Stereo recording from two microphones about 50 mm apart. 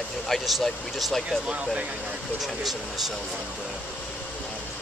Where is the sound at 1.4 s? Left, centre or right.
Centre.